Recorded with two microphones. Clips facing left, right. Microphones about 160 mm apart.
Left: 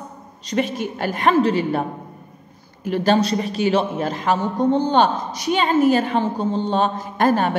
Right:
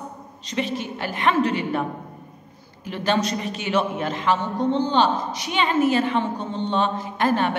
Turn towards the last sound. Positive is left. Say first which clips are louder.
# left 3 dB
turn(degrees=40)  # may be behind; listen again after turning